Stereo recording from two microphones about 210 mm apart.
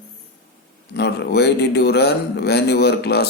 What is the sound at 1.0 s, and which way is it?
A man's voice, 50° left (ahead or behind).